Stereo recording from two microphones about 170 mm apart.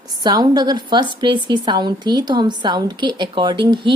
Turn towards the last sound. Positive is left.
turn(degrees=-25)  # may be behind; listen again after turning